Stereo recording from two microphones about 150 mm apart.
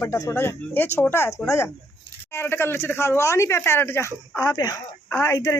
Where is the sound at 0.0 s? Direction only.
20° left (ahead or behind).